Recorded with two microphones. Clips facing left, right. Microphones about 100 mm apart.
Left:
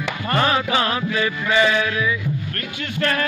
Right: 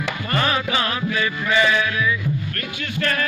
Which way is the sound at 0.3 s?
30° left (ahead or behind).